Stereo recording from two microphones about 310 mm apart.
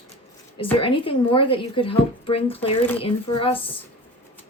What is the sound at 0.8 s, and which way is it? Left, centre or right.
Speech, centre.